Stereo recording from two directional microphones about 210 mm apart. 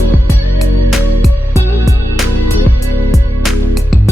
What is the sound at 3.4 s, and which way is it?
Music, centre (ahead or behind).